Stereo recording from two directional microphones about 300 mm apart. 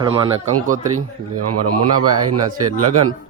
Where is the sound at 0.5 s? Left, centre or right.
Right.